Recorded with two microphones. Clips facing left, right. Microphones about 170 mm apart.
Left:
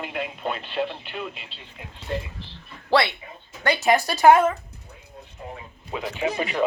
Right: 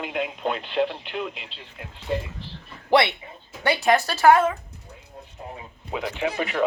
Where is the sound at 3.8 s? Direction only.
10° left (ahead or behind).